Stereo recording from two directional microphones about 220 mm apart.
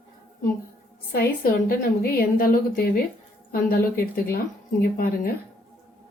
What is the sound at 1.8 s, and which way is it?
A woman's voice, 45° left (ahead or behind).